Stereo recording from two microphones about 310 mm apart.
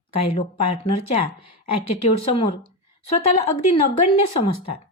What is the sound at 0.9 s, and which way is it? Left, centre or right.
Speech, left.